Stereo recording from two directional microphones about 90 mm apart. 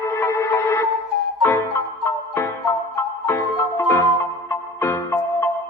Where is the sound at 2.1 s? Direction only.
30° left (ahead or behind).